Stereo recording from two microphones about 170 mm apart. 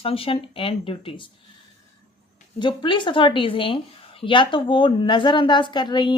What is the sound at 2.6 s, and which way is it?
A woman's voice, 30° left (ahead or behind).